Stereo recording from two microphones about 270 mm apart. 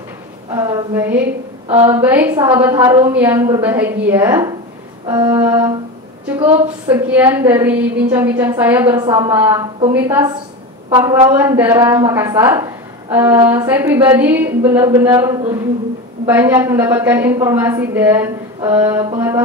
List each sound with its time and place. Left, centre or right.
0.5 s a woman's voice: centre